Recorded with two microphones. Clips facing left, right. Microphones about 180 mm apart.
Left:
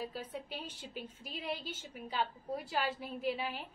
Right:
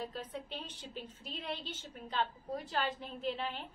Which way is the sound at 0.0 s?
10° left (ahead or behind).